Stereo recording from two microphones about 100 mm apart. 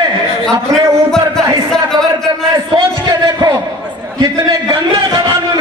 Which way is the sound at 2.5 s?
40° right (ahead or behind).